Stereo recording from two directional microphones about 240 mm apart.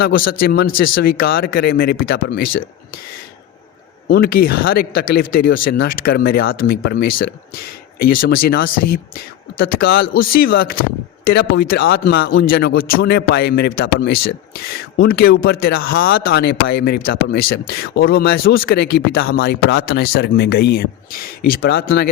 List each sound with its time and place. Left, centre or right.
0.3 s speech: left
4.1 s speech: left